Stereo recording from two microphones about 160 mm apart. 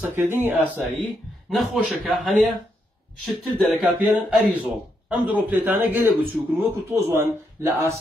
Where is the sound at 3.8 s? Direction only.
10° right (ahead or behind).